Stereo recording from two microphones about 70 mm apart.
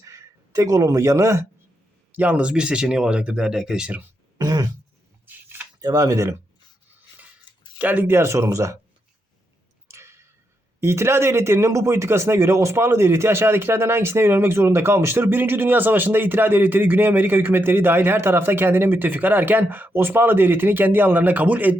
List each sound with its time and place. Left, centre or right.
0.0 s speech: right
2.1 s speech: right
4.4 s throat clearing: right
5.2 s a sound: right
5.8 s speech: right
7.8 s speech: right
8.1 s speech: right
9.9 s a sound: right
10.8 s speech: right